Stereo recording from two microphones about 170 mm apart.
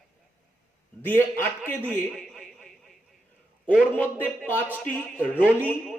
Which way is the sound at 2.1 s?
Centre (ahead or behind).